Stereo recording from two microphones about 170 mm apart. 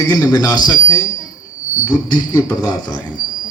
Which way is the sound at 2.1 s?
25° left (ahead or behind).